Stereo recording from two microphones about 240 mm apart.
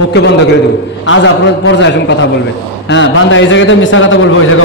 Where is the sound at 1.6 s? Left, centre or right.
Left.